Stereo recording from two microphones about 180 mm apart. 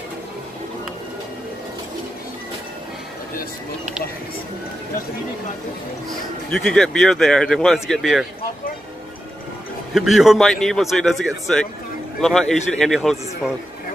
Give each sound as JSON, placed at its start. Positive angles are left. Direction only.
{"t": 6.5, "sound": "speech", "side_deg": 5}
{"t": 9.9, "sound": "speech", "side_deg": 0}